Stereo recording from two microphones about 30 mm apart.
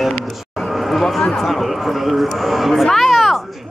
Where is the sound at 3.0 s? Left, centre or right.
Centre.